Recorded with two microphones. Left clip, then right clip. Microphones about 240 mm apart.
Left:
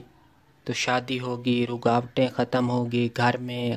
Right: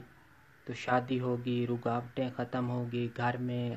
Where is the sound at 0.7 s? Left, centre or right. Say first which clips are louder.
Left 6 dB; left.